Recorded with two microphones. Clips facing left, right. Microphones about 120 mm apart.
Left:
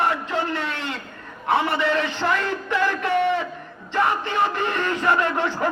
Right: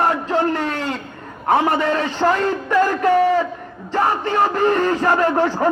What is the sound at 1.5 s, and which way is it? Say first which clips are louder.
Speech: right 4 dB; 45° right (ahead or behind).